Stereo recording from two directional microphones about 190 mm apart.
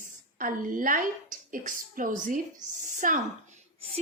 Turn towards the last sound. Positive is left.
turn(degrees=-35)  # may be behind; listen again after turning